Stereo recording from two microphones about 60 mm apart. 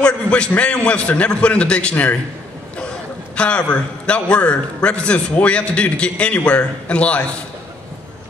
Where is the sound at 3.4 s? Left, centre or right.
Centre.